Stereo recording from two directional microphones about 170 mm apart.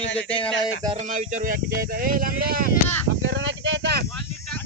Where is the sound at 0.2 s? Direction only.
5° left (ahead or behind).